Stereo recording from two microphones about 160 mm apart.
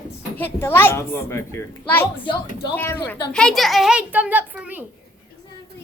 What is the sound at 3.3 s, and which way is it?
A child's voice, centre (ahead or behind).